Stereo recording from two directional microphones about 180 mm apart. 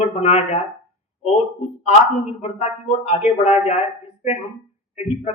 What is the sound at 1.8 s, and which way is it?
A man's voice, 40° left (ahead or behind).